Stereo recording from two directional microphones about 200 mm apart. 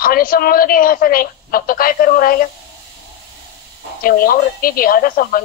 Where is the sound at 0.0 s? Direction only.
45° left (ahead or behind).